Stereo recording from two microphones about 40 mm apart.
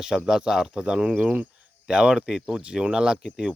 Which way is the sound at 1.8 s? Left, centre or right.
Right.